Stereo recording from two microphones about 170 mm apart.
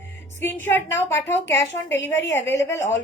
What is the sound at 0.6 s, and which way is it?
A woman's voice, 15° left (ahead or behind).